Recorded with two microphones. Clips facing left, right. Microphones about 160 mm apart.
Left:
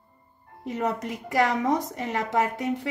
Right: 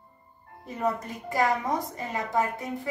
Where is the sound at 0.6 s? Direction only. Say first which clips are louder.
Left 1 dB; 90° left.